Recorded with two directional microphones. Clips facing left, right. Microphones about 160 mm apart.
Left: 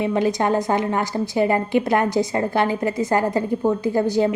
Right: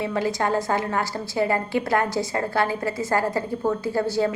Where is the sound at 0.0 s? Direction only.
20° left (ahead or behind).